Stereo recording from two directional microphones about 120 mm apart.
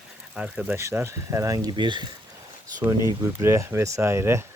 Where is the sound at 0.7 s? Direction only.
20° right (ahead or behind); by 2.0 s 40° right (ahead or behind).